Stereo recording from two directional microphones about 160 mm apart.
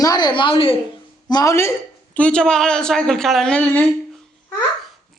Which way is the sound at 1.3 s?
25° left (ahead or behind).